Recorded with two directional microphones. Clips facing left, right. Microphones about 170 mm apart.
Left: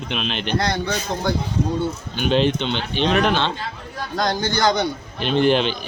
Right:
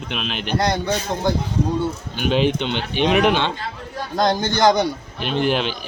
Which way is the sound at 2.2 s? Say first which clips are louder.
Even; 10° right (ahead or behind).